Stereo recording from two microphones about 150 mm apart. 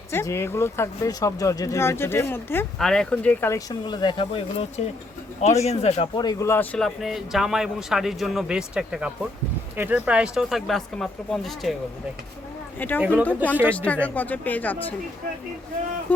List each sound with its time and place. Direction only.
0.1 s speech: 15° left (ahead or behind)
2.7 s speech: 5° left (ahead or behind)
3.7 s speech: 30° left (ahead or behind)
5.4 s speech: 45° left (ahead or behind)
6.1 s speech: 25° left (ahead or behind)
6.5 s speech: 10° left (ahead or behind)
13.0 s speech: 10° right (ahead or behind)
13.2 s speech: 10° left (ahead or behind)